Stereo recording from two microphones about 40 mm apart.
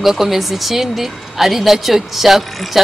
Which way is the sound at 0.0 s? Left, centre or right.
Centre.